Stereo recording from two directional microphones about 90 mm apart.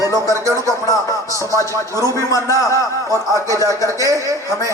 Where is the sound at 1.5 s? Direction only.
40° left (ahead or behind).